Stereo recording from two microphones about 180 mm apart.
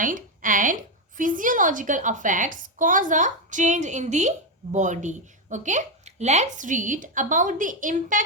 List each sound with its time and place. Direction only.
0.0 s a woman's voice: 45° right (ahead or behind)